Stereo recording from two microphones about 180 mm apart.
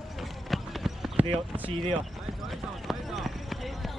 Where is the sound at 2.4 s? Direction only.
Centre (ahead or behind).